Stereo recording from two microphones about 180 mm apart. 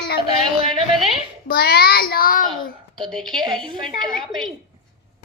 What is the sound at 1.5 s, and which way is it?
A child's voice, 60° left (ahead or behind).